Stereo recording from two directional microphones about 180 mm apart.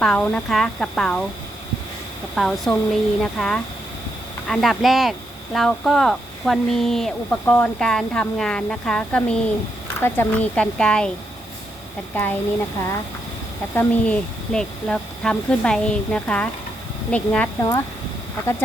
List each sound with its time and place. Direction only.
0.0 s speech: 5° left (ahead or behind)
2.3 s speech: centre (ahead or behind)
12.1 s speech: 10° left (ahead or behind)
13.7 s speech: 10° left (ahead or behind)
17.6 s speech: 15° left (ahead or behind)